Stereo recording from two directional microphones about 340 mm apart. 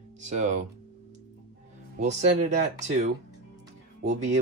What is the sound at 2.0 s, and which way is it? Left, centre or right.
Speech, right.